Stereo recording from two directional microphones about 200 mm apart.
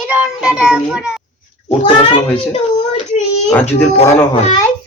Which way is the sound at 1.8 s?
30° left (ahead or behind).